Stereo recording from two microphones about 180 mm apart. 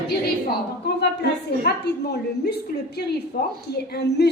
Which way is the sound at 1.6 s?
65° left (ahead or behind).